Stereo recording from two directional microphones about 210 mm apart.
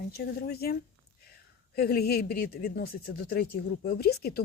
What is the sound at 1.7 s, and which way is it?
Speech, 50° left (ahead or behind).